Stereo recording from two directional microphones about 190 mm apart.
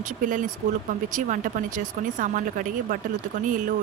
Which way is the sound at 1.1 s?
40° right (ahead or behind).